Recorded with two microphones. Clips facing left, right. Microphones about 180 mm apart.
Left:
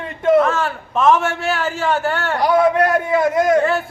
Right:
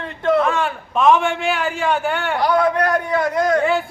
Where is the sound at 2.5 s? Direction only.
20° left (ahead or behind).